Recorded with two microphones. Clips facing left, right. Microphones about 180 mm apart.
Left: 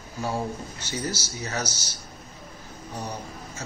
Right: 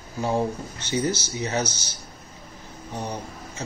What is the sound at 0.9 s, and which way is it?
Speech, 20° right (ahead or behind).